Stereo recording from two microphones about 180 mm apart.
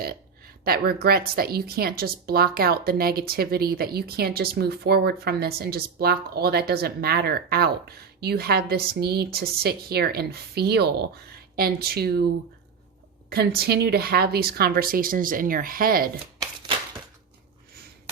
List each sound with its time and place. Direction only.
0.6 s a woman's voice: 60° right (ahead or behind)
13.3 s a woman's voice: 60° right (ahead or behind)